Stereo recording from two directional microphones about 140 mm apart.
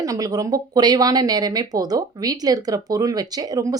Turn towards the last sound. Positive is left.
turn(degrees=-25)  # may be behind; listen again after turning